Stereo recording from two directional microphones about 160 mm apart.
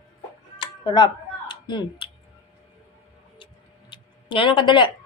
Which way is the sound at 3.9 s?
30° left (ahead or behind).